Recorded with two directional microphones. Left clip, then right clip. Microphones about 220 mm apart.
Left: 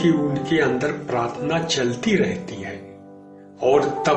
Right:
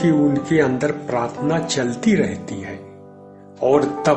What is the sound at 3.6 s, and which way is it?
Speech, 45° right (ahead or behind).